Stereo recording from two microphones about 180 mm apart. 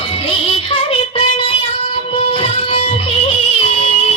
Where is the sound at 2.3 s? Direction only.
35° left (ahead or behind).